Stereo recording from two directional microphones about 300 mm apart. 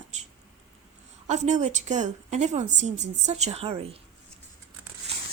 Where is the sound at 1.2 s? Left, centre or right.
Right.